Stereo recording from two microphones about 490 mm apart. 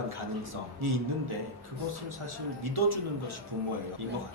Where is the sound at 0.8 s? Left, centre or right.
Right.